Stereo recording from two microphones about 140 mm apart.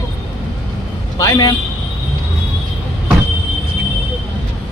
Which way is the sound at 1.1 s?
25° left (ahead or behind).